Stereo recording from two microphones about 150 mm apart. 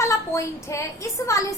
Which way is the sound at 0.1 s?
20° left (ahead or behind).